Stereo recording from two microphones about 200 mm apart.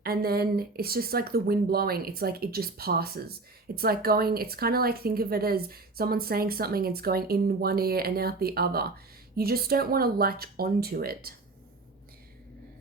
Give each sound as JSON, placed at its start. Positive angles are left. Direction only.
{"t": 0.0, "sound": "speech", "side_deg": -50}